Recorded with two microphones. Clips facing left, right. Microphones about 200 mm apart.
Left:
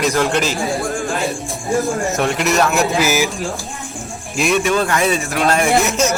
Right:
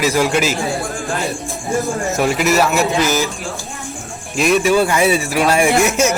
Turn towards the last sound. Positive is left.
turn(degrees=-10)  # may be behind; listen again after turning